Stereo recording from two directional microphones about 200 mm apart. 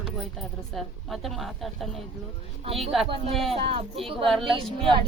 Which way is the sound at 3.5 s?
30° right (ahead or behind).